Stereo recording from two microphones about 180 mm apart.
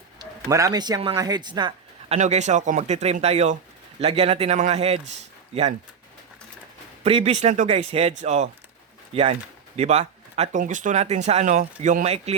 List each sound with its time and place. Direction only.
0.2 s speech: 15° right (ahead or behind)
2.1 s speech: 40° right (ahead or behind)
7.0 s speech: 35° right (ahead or behind)